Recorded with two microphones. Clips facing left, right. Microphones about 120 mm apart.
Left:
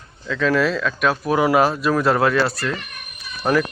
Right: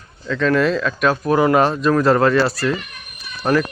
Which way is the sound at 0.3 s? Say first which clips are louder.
Right 2 dB; centre (ahead or behind).